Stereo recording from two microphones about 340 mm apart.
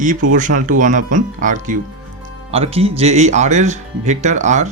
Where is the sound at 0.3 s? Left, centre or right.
Right.